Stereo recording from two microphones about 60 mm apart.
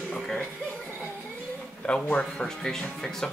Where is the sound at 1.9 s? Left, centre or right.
Centre.